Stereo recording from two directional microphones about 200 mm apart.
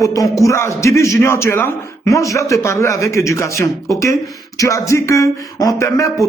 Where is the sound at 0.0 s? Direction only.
15° left (ahead or behind).